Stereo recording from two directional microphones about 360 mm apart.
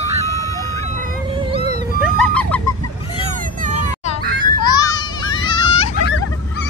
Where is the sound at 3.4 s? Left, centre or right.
Right.